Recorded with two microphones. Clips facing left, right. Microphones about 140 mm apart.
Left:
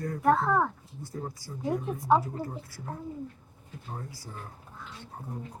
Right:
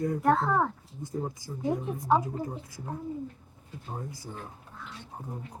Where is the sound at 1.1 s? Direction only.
20° right (ahead or behind).